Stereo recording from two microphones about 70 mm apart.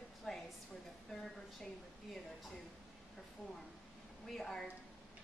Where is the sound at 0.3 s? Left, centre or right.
Centre.